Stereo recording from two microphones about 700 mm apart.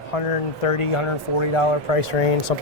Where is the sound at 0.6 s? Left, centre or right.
Left.